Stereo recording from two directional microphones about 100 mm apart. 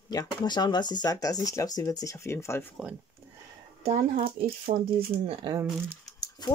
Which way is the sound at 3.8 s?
90° right.